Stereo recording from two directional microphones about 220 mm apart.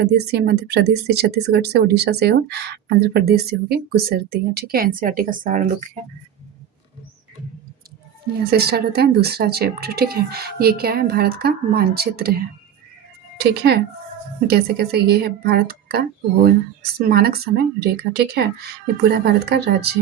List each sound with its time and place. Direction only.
0.0 s a woman's voice: 50° right (ahead or behind)
8.4 s speech: 45° right (ahead or behind)